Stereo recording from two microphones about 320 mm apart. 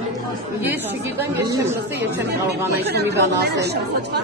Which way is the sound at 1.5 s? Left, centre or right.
Centre.